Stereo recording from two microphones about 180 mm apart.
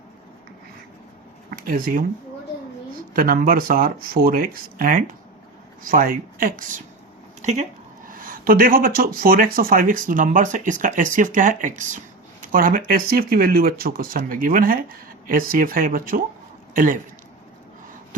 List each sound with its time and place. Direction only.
1.5 s speech: 55° right (ahead or behind)
3.1 s speech: 55° right (ahead or behind)